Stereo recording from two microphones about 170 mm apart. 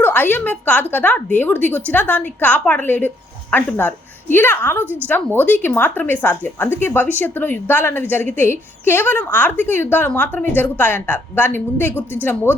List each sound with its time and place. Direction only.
0.0 s a woman's voice: 10° left (ahead or behind)